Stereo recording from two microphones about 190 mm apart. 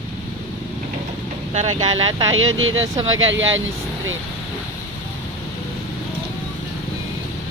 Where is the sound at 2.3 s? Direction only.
90° right.